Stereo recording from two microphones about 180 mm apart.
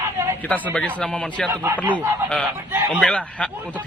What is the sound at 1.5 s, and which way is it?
Speech, 10° right (ahead or behind).